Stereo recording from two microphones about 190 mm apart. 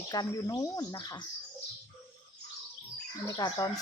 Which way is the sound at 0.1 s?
20° left (ahead or behind).